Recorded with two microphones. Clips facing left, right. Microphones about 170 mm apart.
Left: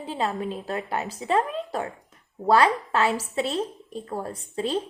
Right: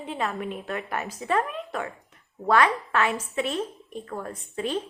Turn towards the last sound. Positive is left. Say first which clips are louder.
# left 2 dB
turn(degrees=30)  # may be behind; listen again after turning